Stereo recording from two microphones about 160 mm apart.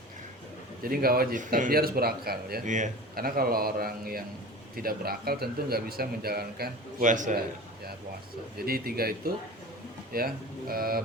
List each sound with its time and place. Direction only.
0.8 s speech: 65° right (ahead or behind)
2.6 s speech: 50° right (ahead or behind); by 6.7 s 75° right (ahead or behind)
7.0 s a man's voice: 50° right (ahead or behind)
8.5 s speech: 70° right (ahead or behind)